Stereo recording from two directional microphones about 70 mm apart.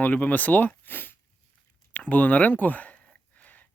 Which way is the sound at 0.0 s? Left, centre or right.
Left.